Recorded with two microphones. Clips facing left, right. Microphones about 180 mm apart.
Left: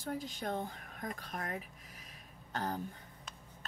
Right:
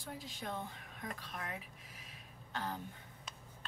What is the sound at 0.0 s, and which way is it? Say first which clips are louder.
Speech: left 6 dB; 45° left (ahead or behind).